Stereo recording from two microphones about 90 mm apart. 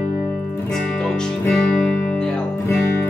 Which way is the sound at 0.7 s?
5° left (ahead or behind).